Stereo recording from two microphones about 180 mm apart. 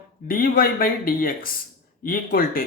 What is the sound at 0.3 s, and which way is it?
Speech, 50° left (ahead or behind).